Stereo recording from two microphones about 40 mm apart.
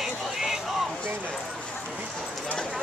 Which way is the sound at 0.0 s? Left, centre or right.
Centre.